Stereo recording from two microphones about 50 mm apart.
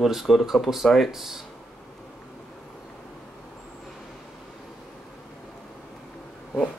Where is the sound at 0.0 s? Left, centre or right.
Centre.